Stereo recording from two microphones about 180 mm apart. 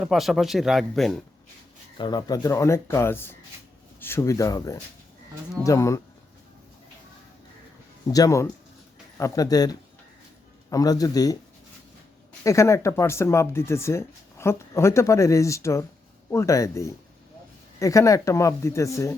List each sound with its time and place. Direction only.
0.0 s speech: centre (ahead or behind)
2.0 s speech: 25° left (ahead or behind)
8.0 s a man's voice: 20° left (ahead or behind)
12.4 s speech: 15° left (ahead or behind)